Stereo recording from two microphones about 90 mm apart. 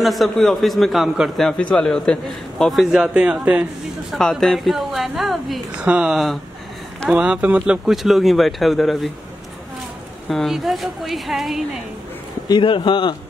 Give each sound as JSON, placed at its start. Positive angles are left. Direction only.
{"t": 0.0, "sound": "a man's voice", "side_deg": 0}
{"t": 1.6, "sound": "a man's voice", "side_deg": 10}
{"t": 4.1, "sound": "a man's voice", "side_deg": 5}
{"t": 10.2, "sound": "a man's voice", "side_deg": 0}
{"t": 12.4, "sound": "speech", "side_deg": 60}